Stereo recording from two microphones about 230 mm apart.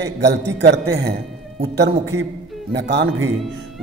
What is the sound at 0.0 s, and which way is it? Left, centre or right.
Speech, right.